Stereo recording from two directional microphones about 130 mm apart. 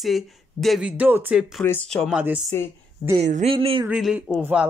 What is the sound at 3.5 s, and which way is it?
Speech, 45° right (ahead or behind).